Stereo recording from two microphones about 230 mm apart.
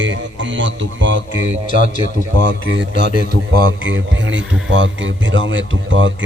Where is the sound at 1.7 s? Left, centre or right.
Left.